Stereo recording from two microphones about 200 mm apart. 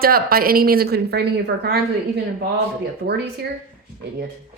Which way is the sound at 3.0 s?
45° right (ahead or behind).